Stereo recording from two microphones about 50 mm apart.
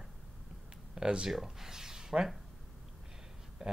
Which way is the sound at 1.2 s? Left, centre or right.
Centre.